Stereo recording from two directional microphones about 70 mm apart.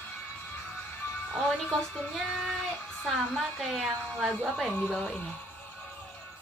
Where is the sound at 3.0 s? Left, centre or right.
Centre.